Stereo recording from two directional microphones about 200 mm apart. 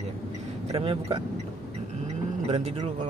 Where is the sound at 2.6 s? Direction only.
30° right (ahead or behind).